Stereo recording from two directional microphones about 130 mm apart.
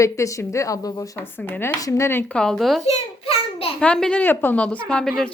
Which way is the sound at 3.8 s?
10° left (ahead or behind).